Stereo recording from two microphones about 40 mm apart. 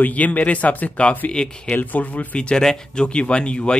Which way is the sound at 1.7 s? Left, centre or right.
Left.